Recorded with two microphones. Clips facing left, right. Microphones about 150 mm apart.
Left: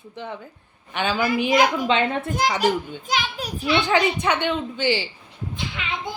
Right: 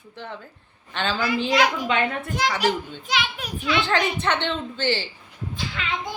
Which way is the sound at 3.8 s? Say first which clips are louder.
Left 2 dB; 15° left (ahead or behind).